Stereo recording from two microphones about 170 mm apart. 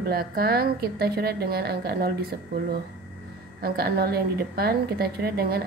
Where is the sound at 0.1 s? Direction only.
65° right (ahead or behind).